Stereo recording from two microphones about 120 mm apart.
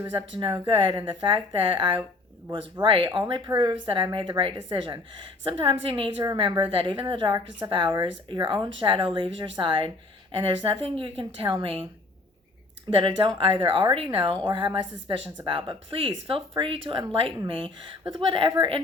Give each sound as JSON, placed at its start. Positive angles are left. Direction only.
{"t": 0.3, "sound": "a woman's voice", "side_deg": -45}
{"t": 12.9, "sound": "a woman's voice", "side_deg": -45}